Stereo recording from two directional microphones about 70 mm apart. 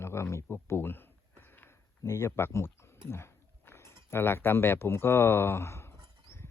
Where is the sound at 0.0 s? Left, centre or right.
Left.